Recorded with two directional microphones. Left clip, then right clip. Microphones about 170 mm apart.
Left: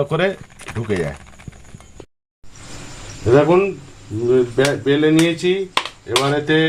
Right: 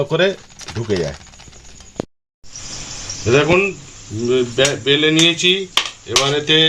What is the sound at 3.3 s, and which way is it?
Speech, 35° left (ahead or behind).